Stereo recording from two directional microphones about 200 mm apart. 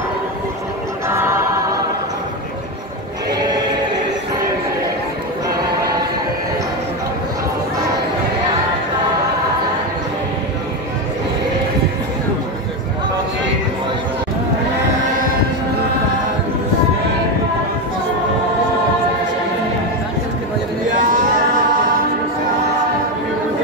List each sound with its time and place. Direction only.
1.0 s choir: 10° right (ahead or behind)
20.9 s male singing: 40° right (ahead or behind)